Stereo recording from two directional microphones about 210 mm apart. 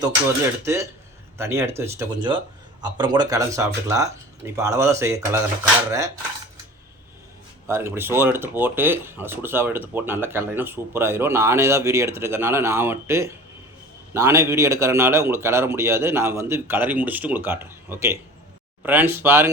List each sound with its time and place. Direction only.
0.6 s speech: 15° right (ahead or behind)
7.7 s speech: 10° right (ahead or behind)